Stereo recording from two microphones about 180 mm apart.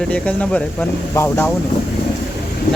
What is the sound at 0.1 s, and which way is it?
Speech, 5° left (ahead or behind).